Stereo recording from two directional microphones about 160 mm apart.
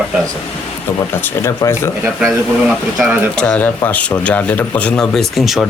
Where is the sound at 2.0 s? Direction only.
10° right (ahead or behind).